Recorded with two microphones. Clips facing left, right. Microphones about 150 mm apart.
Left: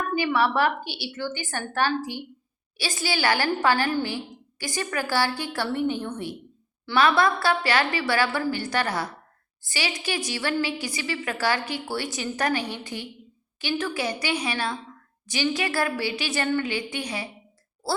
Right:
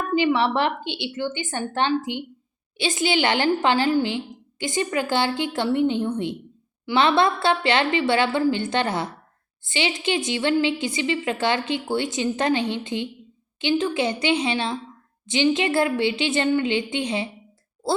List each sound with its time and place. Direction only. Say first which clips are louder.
0.1 s a woman's voice: right 4 dB; 20° right (ahead or behind)